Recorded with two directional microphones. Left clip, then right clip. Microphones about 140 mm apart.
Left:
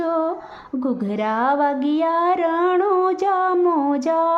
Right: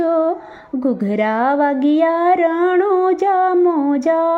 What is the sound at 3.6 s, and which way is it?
Female singing, 10° right (ahead or behind).